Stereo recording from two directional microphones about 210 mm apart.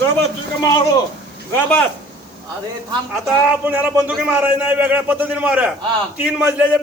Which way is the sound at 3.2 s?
10° right (ahead or behind).